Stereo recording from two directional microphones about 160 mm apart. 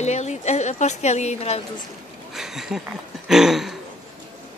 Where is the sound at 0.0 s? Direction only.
45° left (ahead or behind).